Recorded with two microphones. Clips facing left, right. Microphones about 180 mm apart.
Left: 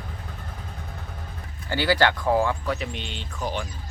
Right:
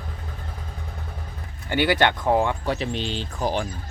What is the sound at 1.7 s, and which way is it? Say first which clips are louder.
Speech: right 1 dB; 20° right (ahead or behind).